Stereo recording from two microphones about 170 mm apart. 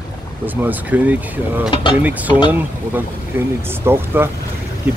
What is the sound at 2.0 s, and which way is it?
Speech, 10° right (ahead or behind).